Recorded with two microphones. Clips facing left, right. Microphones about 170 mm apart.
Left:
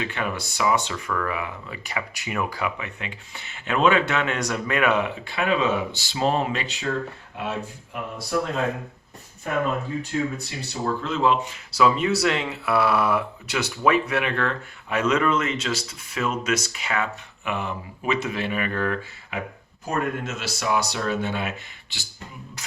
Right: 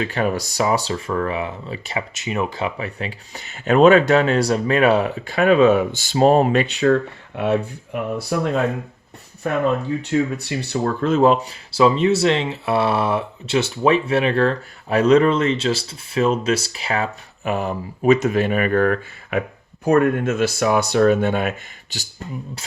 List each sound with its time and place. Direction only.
0.0 s speech: 40° right (ahead or behind); by 7.7 s 65° right (ahead or behind)
10.0 s speech: 70° right (ahead or behind); by 11.5 s 45° right (ahead or behind)
11.7 s speech: 25° right (ahead or behind); by 22.0 s 45° right (ahead or behind)